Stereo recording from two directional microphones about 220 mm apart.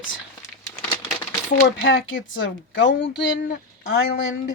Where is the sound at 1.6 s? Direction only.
55° left (ahead or behind).